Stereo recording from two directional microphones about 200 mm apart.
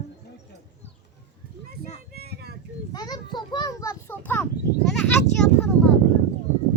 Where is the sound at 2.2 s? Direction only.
55° right (ahead or behind).